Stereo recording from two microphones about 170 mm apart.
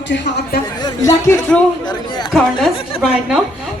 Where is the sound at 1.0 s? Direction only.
15° left (ahead or behind).